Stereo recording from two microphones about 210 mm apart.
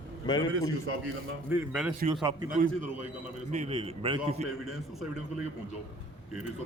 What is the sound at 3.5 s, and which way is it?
Speech, 30° right (ahead or behind).